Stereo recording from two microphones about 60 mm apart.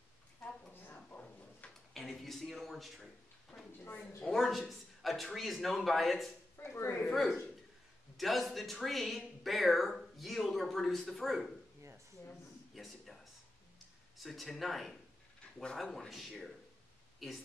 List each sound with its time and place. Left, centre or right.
1.6 s a sound: left
2.0 s speech: centre
3.5 s a woman's voice: left
4.3 s speech: centre
6.6 s speech: left
7.1 s speech: centre
12.7 s a sound: centre
14.1 s speech: centre